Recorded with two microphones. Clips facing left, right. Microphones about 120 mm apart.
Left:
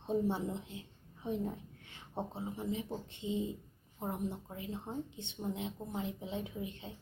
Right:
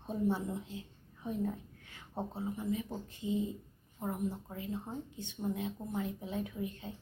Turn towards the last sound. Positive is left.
turn(degrees=20)  # may be behind; listen again after turning